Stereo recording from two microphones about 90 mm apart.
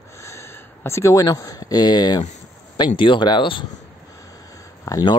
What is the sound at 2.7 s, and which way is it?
Speech, 60° left (ahead or behind).